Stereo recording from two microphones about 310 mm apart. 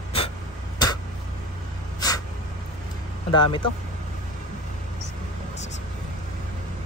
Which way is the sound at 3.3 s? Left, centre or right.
Centre.